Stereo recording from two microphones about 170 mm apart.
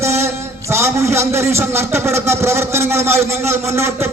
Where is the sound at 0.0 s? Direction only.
15° right (ahead or behind).